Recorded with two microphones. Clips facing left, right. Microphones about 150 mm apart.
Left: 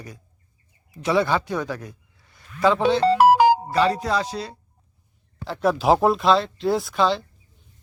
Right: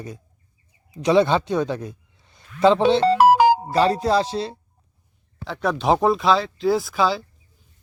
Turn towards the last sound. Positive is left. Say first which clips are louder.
# even
turn(degrees=0)  # may be behind; listen again after turning